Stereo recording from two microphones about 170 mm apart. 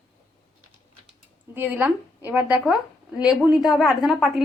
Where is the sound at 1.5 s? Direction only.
10° right (ahead or behind).